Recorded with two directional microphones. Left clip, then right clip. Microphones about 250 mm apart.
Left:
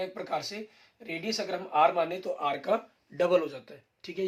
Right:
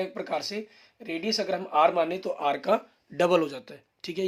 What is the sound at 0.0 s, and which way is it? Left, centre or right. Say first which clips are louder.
Speech: right 3 dB; right.